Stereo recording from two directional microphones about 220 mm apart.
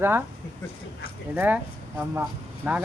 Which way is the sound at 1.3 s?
5° right (ahead or behind).